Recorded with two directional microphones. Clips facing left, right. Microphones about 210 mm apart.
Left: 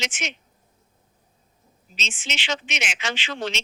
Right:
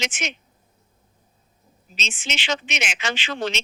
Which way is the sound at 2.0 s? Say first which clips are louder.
Right 2 dB; 45° right (ahead or behind).